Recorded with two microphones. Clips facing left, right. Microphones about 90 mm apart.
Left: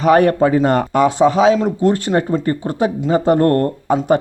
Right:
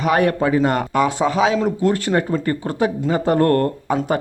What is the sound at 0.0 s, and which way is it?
Speech, 35° left (ahead or behind).